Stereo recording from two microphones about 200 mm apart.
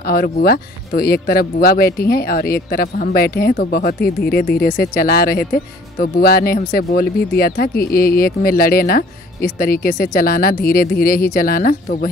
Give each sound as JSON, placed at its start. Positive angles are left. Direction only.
{"t": 0.0, "sound": "speech", "side_deg": 45}